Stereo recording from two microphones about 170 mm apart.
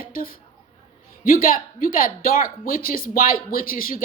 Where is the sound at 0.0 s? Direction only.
55° left (ahead or behind).